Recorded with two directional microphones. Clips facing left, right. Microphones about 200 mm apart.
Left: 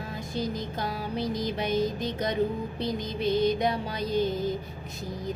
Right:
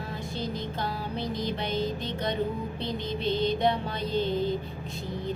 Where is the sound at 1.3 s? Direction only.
45° left (ahead or behind).